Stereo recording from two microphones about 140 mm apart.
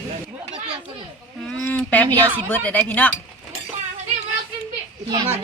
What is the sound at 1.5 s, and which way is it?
Speech, 10° left (ahead or behind).